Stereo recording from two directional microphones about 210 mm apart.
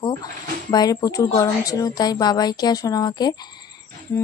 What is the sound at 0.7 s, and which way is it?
A woman's voice, 20° left (ahead or behind).